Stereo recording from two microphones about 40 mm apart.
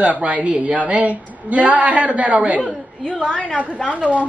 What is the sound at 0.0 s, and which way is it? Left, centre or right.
A woman's voice, right.